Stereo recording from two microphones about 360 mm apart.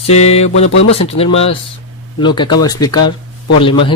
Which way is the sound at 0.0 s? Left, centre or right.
Centre.